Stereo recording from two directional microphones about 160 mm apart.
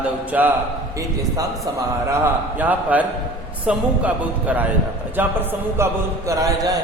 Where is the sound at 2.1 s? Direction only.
10° right (ahead or behind).